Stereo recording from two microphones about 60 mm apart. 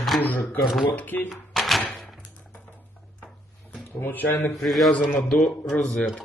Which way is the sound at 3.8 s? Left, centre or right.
Left.